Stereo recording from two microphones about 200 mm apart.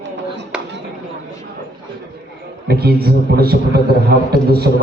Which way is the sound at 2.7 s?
50° right (ahead or behind).